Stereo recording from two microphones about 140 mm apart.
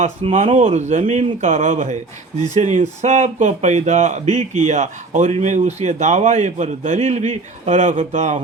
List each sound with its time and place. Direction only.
0.2 s speech: 40° right (ahead or behind)
0.6 s a man's voice: 50° right (ahead or behind)